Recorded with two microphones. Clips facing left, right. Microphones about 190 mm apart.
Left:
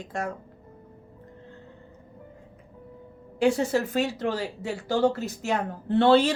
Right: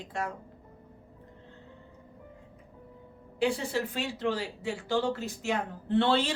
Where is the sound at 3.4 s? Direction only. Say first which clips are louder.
Left 6 dB; 45° left (ahead or behind).